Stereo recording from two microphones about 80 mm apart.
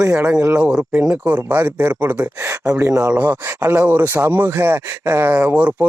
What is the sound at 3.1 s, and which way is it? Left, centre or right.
Speech, right.